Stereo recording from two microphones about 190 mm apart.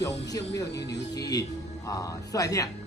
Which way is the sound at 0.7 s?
60° left (ahead or behind).